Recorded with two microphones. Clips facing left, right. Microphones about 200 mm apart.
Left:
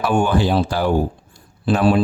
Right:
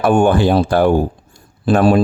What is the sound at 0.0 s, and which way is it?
Speech, 50° right (ahead or behind).